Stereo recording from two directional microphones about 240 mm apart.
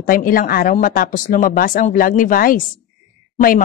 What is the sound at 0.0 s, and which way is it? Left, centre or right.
Speech, left.